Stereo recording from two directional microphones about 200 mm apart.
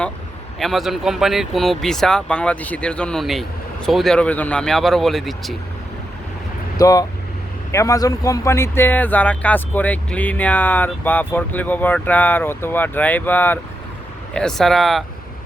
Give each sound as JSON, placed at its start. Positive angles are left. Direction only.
{"t": 0.6, "sound": "speech", "side_deg": 0}
{"t": 6.7, "sound": "speech", "side_deg": 20}